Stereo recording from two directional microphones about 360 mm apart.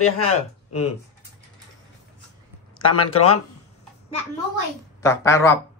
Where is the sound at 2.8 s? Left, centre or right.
Left.